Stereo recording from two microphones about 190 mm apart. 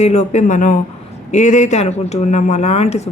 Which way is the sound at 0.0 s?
35° left (ahead or behind).